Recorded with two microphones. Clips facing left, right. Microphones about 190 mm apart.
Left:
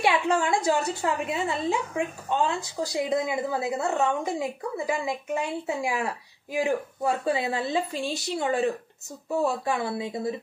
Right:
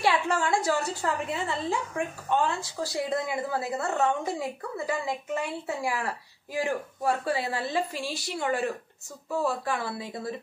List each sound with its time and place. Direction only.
0.0 s a woman's voice: 20° left (ahead or behind)